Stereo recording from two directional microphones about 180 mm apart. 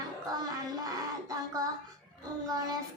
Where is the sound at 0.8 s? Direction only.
20° right (ahead or behind).